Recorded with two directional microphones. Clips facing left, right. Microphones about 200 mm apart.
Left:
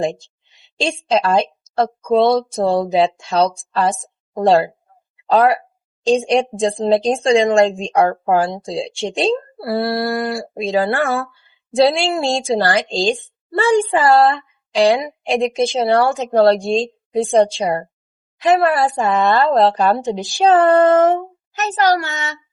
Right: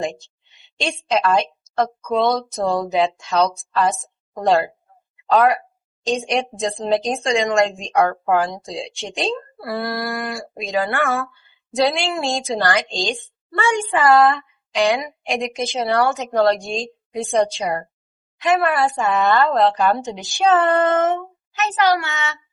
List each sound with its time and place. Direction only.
0.8 s a woman's voice: 30° left (ahead or behind)